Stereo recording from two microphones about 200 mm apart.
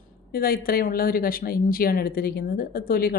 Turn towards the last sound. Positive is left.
turn(degrees=50)  # may be behind; listen again after turning